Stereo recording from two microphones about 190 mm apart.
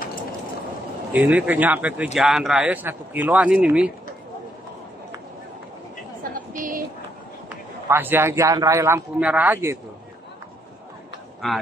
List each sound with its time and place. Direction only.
1.1 s a man's voice: 10° right (ahead or behind)
6.3 s a sound: 45° right (ahead or behind)
7.9 s a man's voice: 10° right (ahead or behind)